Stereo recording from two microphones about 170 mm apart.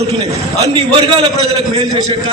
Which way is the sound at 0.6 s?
35° right (ahead or behind).